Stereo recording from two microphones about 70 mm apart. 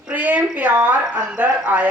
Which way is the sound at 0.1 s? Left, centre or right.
Right.